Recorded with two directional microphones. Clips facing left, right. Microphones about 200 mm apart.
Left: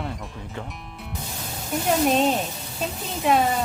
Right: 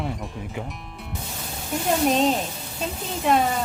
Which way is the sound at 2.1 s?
Centre (ahead or behind).